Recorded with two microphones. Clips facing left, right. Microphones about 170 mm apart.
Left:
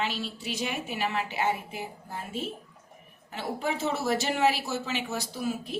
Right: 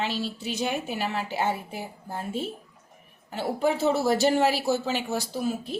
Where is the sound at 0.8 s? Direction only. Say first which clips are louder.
Right 1 dB; 35° right (ahead or behind).